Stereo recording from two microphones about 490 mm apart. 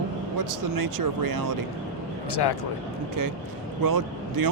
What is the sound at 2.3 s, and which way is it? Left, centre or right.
Speech, left.